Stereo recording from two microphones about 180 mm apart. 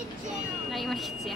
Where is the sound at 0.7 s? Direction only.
Centre (ahead or behind).